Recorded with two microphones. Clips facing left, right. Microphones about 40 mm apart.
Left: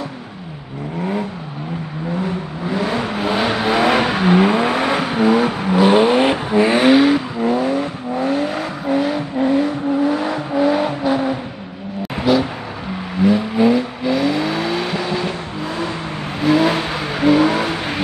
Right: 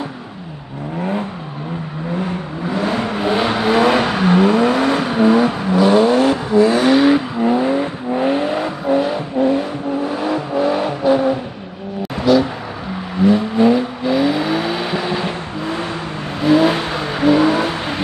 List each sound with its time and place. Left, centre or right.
2.9 s vehicle: centre
5.8 s vehicle: left
7.1 s vehicle: centre
7.6 s vehicle: right
8.5 s vehicle: centre
12.2 s vehicle: centre
13.2 s vehicle: centre
16.4 s vehicle: centre